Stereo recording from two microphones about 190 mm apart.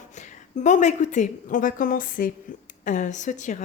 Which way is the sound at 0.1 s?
40° left (ahead or behind).